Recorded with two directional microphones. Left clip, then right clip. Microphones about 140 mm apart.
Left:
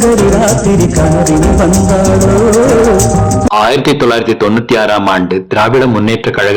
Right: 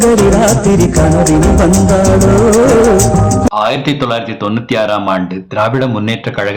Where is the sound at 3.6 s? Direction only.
45° left (ahead or behind).